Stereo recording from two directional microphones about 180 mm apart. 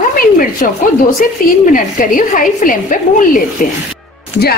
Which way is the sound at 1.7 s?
50° left (ahead or behind).